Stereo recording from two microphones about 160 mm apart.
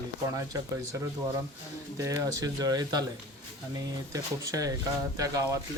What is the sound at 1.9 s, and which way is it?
A man's voice, 20° right (ahead or behind).